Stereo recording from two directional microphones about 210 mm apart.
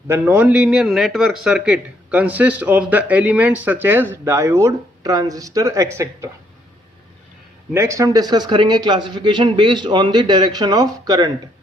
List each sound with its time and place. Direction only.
0.1 s a man's voice: 10° right (ahead or behind)
7.7 s a man's voice: 15° right (ahead or behind)